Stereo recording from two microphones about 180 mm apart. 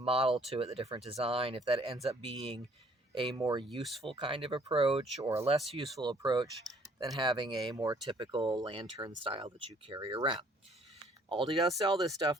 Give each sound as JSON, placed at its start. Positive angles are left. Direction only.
{"t": 0.0, "sound": "speech", "side_deg": -30}
{"t": 5.2, "sound": "speech", "side_deg": -15}